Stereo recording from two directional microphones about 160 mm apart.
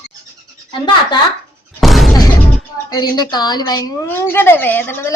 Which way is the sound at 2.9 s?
25° left (ahead or behind).